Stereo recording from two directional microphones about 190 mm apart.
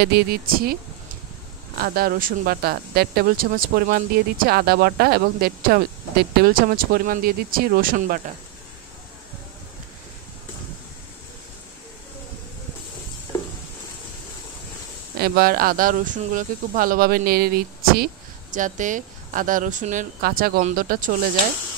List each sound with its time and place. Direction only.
0.0 s speech: 55° right (ahead or behind)
1.8 s speech: 50° right (ahead or behind)
15.1 s speech: 50° right (ahead or behind)